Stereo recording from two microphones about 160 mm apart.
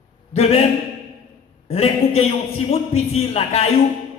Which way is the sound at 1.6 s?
40° left (ahead or behind).